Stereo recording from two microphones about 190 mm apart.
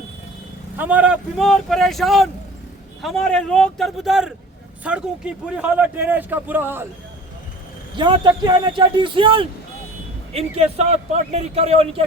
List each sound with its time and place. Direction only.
0.8 s speech: 5° right (ahead or behind)
7.9 s a man's voice: 25° right (ahead or behind)